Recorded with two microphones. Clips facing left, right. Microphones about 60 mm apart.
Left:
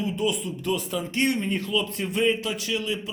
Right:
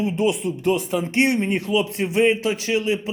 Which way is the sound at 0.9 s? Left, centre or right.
Right.